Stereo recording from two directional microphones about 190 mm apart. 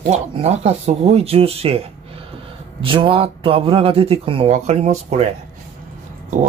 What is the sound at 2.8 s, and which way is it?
Speech, 25° right (ahead or behind).